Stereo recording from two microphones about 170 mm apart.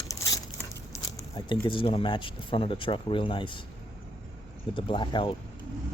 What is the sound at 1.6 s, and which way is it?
Speech, 30° left (ahead or behind).